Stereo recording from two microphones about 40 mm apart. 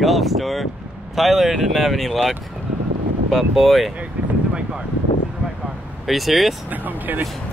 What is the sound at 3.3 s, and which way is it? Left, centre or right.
Speech, centre.